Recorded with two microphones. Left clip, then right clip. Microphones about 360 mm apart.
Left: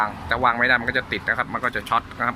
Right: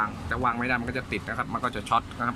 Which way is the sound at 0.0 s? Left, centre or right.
Centre.